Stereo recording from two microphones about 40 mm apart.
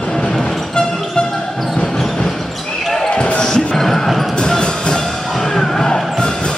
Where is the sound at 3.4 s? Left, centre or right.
Centre.